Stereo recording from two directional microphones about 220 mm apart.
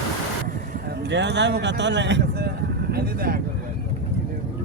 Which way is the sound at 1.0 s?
50° right (ahead or behind).